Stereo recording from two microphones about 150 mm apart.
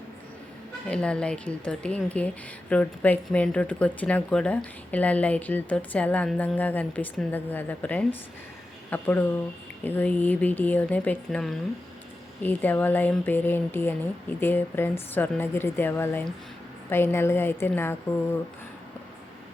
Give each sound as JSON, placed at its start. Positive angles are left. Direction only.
{"t": 0.9, "sound": "speech", "side_deg": 5}